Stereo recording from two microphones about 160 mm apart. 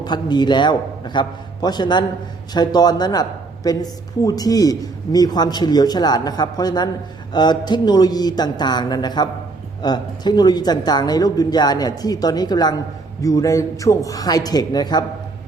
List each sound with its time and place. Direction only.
0.0 s speech: 25° left (ahead or behind)